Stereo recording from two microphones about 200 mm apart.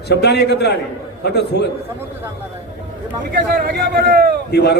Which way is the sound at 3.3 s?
50° right (ahead or behind).